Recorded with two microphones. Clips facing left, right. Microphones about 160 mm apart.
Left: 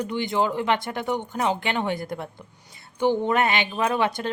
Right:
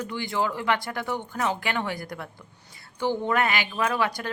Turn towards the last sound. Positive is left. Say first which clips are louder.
# left 3 dB
turn(degrees=25)  # may be behind; listen again after turning